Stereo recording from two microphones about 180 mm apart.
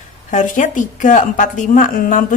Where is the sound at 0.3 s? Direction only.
45° left (ahead or behind).